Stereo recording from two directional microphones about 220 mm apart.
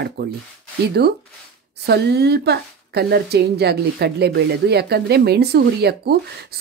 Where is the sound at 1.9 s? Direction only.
50° right (ahead or behind).